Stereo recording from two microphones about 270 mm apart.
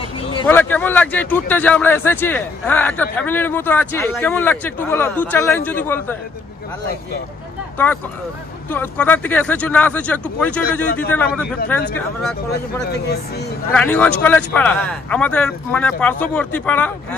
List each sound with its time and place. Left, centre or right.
0.3 s a sound: centre
0.6 s speech: centre
7.7 s speech: centre
12.9 s speech: left
13.7 s speech: centre